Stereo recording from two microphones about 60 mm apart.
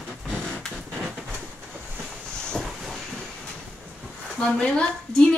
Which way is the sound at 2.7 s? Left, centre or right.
Centre.